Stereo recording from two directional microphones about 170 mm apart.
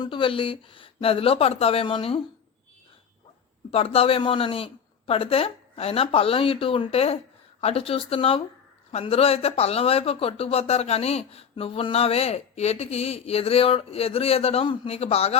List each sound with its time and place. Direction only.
0.0 s speech: 30° left (ahead or behind)
3.7 s speech: 35° left (ahead or behind)